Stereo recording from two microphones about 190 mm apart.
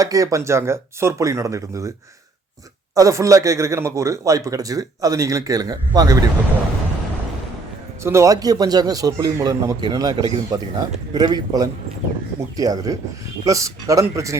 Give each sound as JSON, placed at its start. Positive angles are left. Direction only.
{"t": 0.0, "sound": "speech", "side_deg": -20}
{"t": 2.9, "sound": "speech", "side_deg": -15}
{"t": 8.0, "sound": "a man's voice", "side_deg": -15}